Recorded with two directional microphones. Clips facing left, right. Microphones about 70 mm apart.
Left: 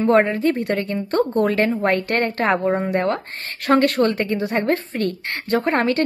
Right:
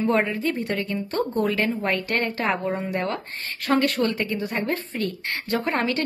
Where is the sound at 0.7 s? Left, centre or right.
Left.